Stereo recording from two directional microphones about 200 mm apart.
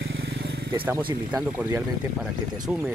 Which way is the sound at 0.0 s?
65° right (ahead or behind).